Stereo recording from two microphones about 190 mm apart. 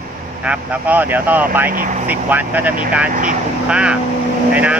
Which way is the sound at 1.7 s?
45° right (ahead or behind).